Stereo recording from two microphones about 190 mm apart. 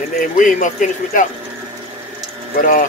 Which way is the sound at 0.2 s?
45° left (ahead or behind).